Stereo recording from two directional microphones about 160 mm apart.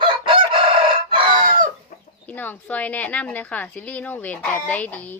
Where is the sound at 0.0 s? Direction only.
35° right (ahead or behind).